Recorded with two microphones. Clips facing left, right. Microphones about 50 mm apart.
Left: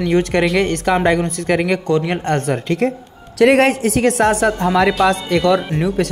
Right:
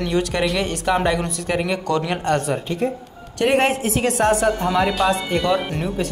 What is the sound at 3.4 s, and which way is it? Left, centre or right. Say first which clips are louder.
Speech: left 6 dB; left.